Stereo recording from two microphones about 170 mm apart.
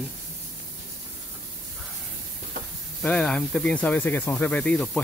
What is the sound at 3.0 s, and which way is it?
Speech, 5° left (ahead or behind).